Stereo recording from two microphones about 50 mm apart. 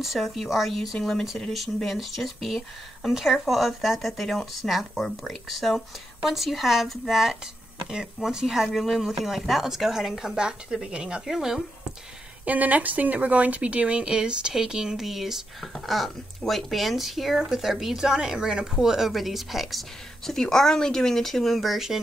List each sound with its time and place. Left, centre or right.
0.0 s speech: centre
0.9 s speech: centre
1.9 s speech: centre
11.3 s speech: centre
12.4 s speech: right; by 19.8 s centre
20.2 s speech: centre